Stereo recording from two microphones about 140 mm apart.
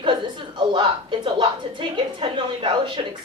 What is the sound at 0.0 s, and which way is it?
A woman's voice, 35° right (ahead or behind).